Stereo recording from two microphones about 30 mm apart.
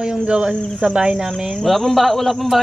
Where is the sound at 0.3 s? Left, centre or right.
Right.